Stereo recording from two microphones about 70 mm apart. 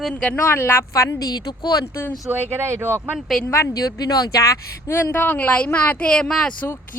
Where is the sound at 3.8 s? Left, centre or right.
Left.